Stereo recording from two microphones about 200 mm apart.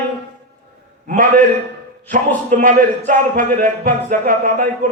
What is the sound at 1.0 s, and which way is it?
Speech, 40° right (ahead or behind).